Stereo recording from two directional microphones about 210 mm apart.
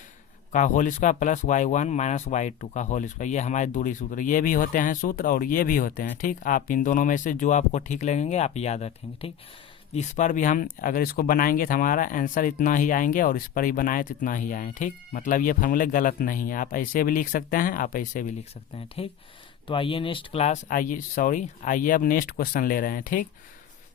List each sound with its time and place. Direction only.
0.5 s speech: 40° left (ahead or behind)
19.0 s speech: 25° left (ahead or behind)